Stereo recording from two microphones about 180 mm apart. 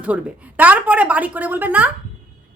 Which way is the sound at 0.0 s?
10° right (ahead or behind).